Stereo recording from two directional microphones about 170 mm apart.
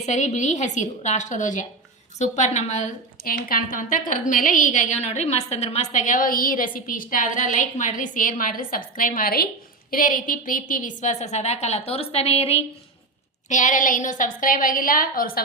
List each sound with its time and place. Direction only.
0.0 s a woman's voice: 45° left (ahead or behind)
3.2 s a woman's voice: 55° left (ahead or behind); by 12.6 s 35° left (ahead or behind)
13.5 s a woman's voice: 45° left (ahead or behind)